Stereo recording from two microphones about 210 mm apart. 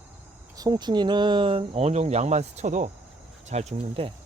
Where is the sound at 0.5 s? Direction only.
15° right (ahead or behind).